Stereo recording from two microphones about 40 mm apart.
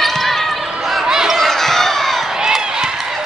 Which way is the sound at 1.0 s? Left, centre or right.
Centre.